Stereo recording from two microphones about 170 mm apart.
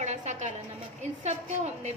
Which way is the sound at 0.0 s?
40° right (ahead or behind).